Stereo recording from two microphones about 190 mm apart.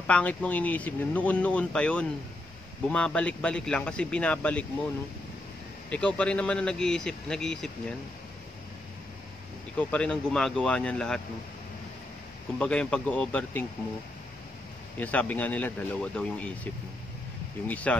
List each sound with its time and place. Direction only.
0.0 s speech: 5° left (ahead or behind)
5.9 s speech: 5° left (ahead or behind)
9.8 s speech: 10° left (ahead or behind)
12.5 s speech: 5° left (ahead or behind)
15.0 s speech: 10° left (ahead or behind)
17.6 s speech: 5° left (ahead or behind)